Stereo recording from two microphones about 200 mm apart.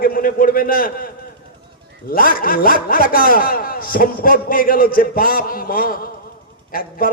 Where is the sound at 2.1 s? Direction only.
45° left (ahead or behind).